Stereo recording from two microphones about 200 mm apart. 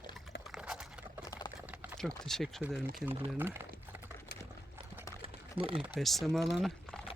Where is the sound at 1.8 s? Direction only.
Centre (ahead or behind).